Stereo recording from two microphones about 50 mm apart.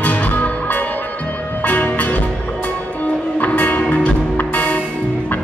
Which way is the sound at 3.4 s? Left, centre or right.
Left.